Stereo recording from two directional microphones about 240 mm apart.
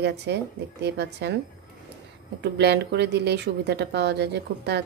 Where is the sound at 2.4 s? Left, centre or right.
Right.